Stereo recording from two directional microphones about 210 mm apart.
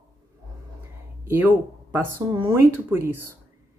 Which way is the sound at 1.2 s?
10° right (ahead or behind).